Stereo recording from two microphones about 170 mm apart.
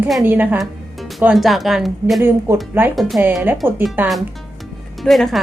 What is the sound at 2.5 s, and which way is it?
Speech, 15° right (ahead or behind).